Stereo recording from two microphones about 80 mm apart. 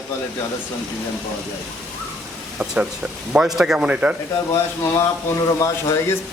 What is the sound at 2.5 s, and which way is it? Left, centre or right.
A man's voice, centre.